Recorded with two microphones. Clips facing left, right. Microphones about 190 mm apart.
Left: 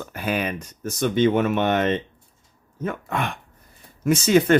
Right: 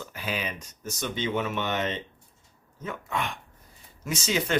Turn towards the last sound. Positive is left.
turn(degrees=55)  # may be behind; listen again after turning